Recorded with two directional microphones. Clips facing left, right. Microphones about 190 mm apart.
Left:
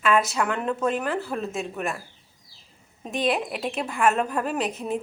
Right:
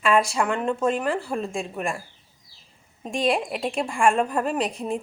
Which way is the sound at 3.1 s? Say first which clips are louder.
Right 1 dB; centre (ahead or behind).